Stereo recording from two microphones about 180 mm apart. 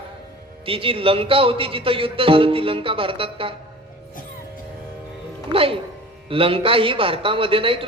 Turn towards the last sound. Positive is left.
turn(degrees=-30)  # may be behind; listen again after turning